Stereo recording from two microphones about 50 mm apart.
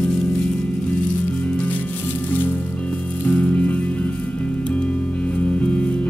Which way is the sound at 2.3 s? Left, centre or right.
Left.